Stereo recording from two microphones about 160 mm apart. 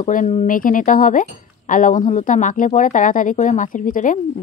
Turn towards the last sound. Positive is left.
turn(degrees=55)  # may be behind; listen again after turning